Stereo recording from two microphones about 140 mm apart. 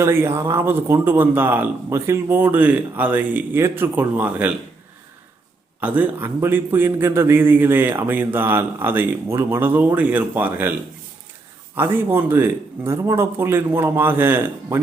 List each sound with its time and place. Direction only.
0.0 s a man's voice: 20° right (ahead or behind)
5.8 s a man's voice: 10° right (ahead or behind)